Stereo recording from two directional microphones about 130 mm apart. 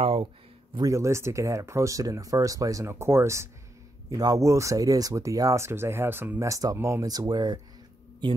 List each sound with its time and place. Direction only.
0.0 s speech: 45° right (ahead or behind)
0.7 s speech: 25° right (ahead or behind)
6.4 s speech: 25° right (ahead or behind)